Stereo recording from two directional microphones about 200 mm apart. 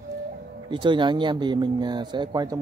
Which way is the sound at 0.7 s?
25° right (ahead or behind).